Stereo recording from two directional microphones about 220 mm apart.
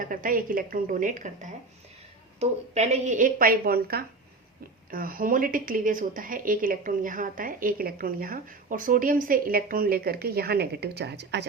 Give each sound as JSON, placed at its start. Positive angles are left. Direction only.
{"t": 0.0, "sound": "a woman's voice", "side_deg": -40}